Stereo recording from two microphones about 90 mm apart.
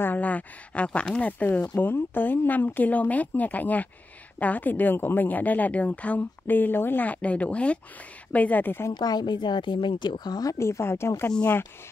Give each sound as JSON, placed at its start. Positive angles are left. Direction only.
{"t": 0.0, "sound": "speech", "side_deg": 20}
{"t": 1.8, "sound": "a woman's voice", "side_deg": 20}
{"t": 8.9, "sound": "speech", "side_deg": 50}
{"t": 10.6, "sound": "a woman's voice", "side_deg": 30}